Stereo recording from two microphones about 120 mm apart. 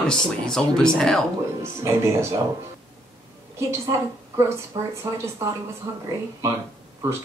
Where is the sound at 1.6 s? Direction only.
25° right (ahead or behind).